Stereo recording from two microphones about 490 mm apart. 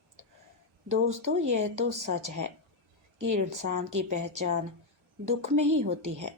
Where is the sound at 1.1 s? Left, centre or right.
Right.